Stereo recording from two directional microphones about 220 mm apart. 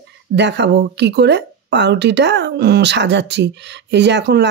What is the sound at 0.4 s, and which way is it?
Speech, 50° right (ahead or behind).